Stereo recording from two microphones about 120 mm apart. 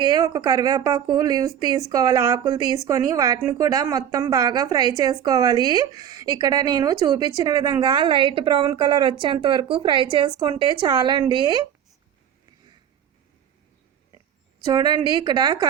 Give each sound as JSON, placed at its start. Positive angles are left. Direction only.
{"t": 0.0, "sound": "speech", "side_deg": -35}
{"t": 14.7, "sound": "speech", "side_deg": -35}